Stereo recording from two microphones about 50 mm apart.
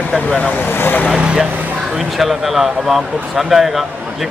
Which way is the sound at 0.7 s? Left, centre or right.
Left.